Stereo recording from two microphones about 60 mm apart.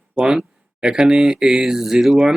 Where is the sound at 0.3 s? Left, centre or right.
Centre.